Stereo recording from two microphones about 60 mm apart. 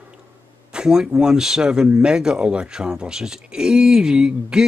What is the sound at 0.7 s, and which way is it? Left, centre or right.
A man's voice, centre.